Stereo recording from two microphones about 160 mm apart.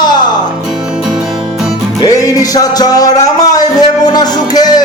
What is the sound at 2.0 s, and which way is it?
Music, 25° left (ahead or behind).